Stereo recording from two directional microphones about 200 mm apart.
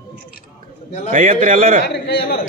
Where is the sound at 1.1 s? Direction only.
40° right (ahead or behind).